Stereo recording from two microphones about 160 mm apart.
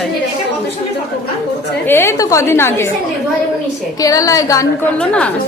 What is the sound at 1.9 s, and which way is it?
A woman's voice, 15° left (ahead or behind).